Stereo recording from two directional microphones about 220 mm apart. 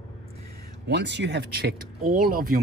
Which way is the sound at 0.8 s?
50° right (ahead or behind).